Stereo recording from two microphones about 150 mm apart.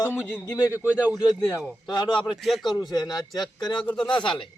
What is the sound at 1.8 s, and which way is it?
Speech, 30° left (ahead or behind).